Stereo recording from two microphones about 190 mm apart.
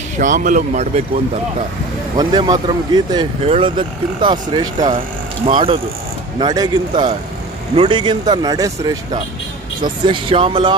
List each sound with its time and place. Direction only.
0.2 s speech: 40° right (ahead or behind)
2.1 s speech: 20° right (ahead or behind)